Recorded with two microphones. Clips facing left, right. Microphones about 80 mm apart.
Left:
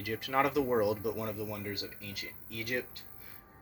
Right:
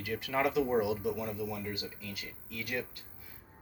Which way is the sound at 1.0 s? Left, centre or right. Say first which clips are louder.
Even; left.